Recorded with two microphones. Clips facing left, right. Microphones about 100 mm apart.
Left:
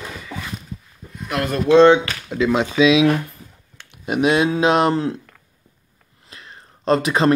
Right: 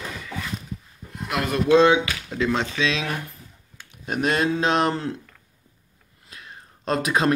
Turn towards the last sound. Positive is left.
turn(degrees=0)  # may be behind; listen again after turning